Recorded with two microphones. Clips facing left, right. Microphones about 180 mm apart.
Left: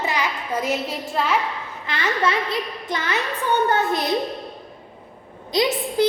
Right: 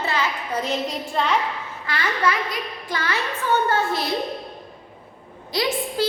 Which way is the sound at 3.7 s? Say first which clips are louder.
Left 2 dB; 20° left (ahead or behind).